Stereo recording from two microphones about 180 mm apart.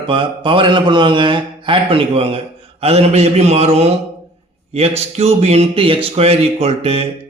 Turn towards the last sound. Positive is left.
turn(degrees=-35)  # may be behind; listen again after turning